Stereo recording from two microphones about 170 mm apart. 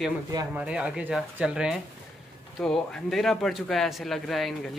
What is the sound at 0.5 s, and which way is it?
A man's voice, 5° right (ahead or behind).